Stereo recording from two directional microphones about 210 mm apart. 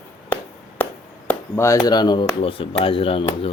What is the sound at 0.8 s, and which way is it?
Speech, 10° left (ahead or behind).